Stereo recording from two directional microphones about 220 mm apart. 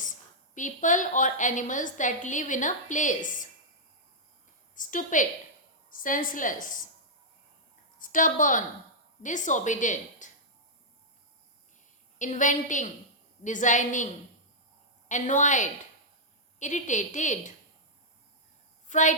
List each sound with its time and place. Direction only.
0.5 s a woman's voice: 35° left (ahead or behind)
4.7 s a woman's voice: 35° left (ahead or behind)
7.9 s a woman's voice: 35° left (ahead or behind)
12.2 s a woman's voice: 35° left (ahead or behind)
15.1 s a woman's voice: 35° left (ahead or behind)
18.9 s a woman's voice: 35° left (ahead or behind)